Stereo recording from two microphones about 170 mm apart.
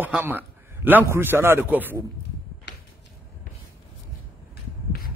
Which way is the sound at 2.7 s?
80° left.